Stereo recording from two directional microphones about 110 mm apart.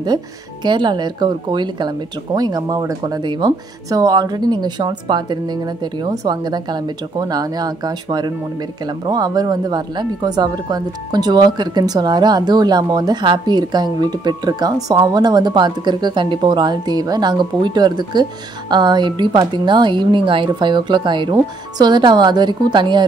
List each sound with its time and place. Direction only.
0.7 s speech: 45° right (ahead or behind)